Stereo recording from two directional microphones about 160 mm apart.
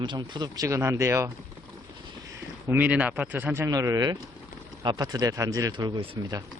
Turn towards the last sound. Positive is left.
turn(degrees=-25)  # may be behind; listen again after turning